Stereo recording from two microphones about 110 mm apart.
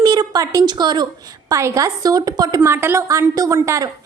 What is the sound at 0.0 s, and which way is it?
Speech, 40° right (ahead or behind).